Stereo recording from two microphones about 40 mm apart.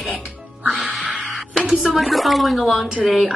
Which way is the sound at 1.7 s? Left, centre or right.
Centre.